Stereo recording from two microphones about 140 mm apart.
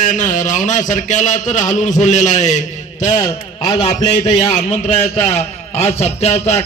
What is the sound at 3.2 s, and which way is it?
Speech, 25° left (ahead or behind).